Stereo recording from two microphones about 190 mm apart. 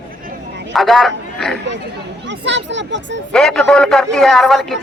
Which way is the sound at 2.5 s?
70° right (ahead or behind).